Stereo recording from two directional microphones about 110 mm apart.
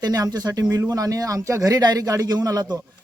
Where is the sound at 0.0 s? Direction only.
35° right (ahead or behind).